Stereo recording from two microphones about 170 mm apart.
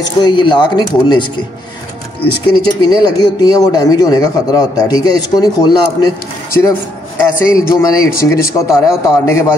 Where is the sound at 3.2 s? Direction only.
25° left (ahead or behind).